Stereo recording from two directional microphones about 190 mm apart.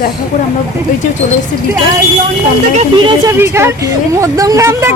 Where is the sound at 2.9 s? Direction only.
25° right (ahead or behind).